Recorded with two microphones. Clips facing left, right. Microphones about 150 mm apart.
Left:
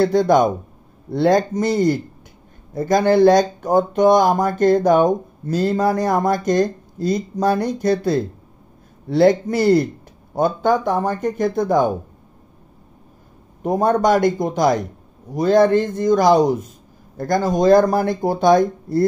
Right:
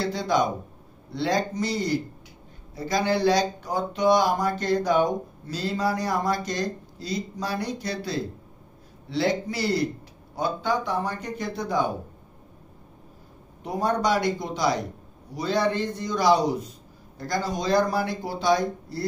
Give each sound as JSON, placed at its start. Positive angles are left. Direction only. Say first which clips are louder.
{"t": 0.0, "sound": "speech", "louder": "left 10 dB", "side_deg": 50}
{"t": 13.6, "sound": "speech", "louder": "left 8 dB", "side_deg": 50}